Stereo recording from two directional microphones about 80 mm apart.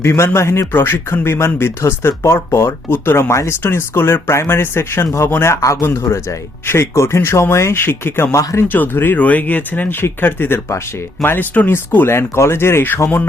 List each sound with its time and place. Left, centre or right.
0.0 s speech: left